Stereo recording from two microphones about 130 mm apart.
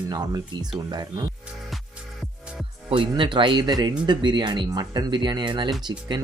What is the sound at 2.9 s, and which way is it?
Speech, 40° right (ahead or behind).